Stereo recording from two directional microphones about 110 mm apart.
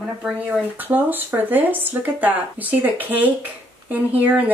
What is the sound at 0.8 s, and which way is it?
Speech, 15° right (ahead or behind).